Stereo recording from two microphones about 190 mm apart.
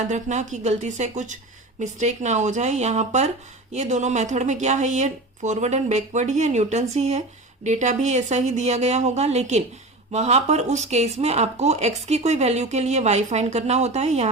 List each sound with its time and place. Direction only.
0.1 s speech: 40° right (ahead or behind)